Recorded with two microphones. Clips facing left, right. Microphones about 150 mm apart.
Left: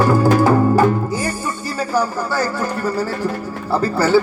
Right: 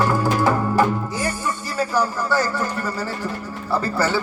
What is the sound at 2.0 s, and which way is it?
Speech, 10° left (ahead or behind).